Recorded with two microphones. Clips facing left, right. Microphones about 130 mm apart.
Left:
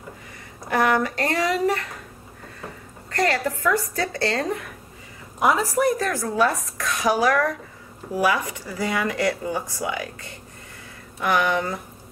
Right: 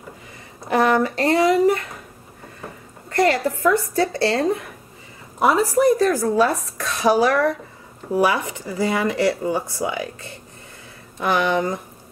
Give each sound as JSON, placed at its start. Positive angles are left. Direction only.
{"t": 0.7, "sound": "speech", "side_deg": -25}
{"t": 3.1, "sound": "speech", "side_deg": -25}